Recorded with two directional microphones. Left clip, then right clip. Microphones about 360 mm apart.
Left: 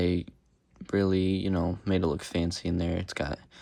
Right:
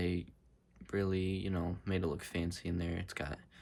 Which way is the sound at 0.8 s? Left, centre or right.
Centre.